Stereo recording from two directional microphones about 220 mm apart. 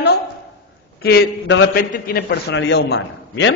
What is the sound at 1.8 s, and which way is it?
A man's voice, 40° left (ahead or behind).